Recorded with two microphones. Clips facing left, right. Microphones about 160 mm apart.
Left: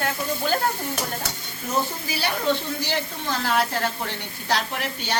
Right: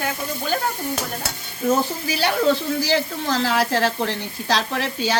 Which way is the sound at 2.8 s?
90° right.